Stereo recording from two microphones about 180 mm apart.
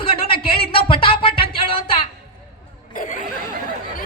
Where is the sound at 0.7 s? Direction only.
30° left (ahead or behind).